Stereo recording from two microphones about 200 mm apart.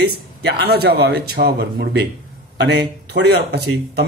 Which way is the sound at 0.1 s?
60° right (ahead or behind).